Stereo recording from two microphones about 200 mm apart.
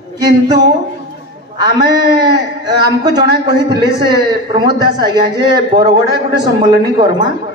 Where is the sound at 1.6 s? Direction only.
20° right (ahead or behind).